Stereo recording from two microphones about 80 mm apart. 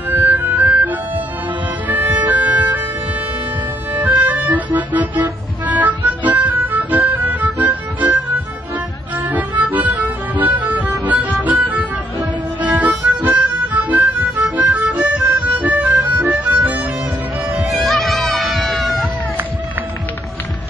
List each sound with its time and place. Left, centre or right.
0.1 s music: right
3.9 s accordion: right
5.7 s music: centre
17.6 s music: centre